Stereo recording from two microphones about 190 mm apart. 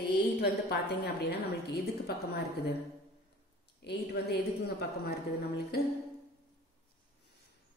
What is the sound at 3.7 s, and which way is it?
A woman's voice, 60° left (ahead or behind).